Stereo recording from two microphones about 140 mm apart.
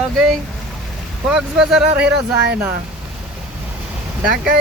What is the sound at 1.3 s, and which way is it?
Speech, 5° right (ahead or behind).